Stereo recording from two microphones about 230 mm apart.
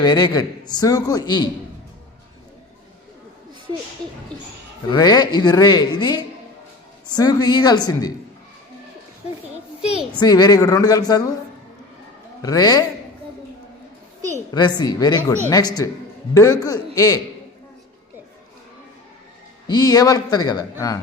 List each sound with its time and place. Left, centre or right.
0.0 s a man's voice: centre
4.9 s a man's voice: centre
10.2 s a man's voice: centre
12.4 s a man's voice: centre
14.5 s a man's voice: centre
19.6 s a man's voice: centre